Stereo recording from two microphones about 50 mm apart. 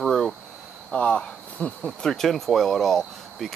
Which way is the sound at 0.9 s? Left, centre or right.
Left.